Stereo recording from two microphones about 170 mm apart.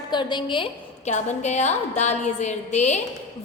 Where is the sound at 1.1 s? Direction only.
40° left (ahead or behind).